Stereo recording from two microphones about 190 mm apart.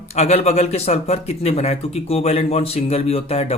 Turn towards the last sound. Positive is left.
turn(degrees=35)  # may be behind; listen again after turning